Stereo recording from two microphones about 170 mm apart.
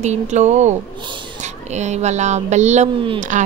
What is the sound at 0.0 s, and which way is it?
A woman's voice, 40° right (ahead or behind).